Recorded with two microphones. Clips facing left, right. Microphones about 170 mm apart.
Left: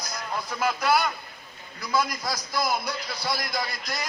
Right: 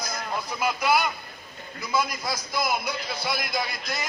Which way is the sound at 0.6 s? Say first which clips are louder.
Even; 10° right (ahead or behind).